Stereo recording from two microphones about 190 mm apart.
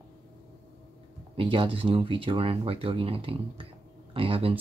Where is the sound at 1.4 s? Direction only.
25° right (ahead or behind).